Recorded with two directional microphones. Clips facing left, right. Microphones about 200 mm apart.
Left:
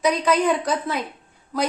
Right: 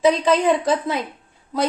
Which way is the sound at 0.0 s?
25° right (ahead or behind).